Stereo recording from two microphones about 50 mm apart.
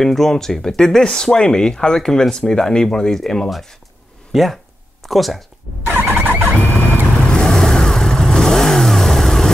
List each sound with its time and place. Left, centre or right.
0.0 s speech: centre
4.3 s speech: centre
5.9 s vehicle: right
7.2 s vehicle: centre